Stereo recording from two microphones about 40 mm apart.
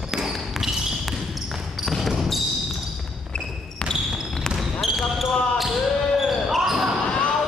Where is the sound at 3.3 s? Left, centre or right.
Left.